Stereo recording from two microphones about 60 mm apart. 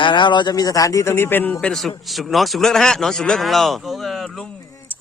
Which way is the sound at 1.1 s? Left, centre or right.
Left.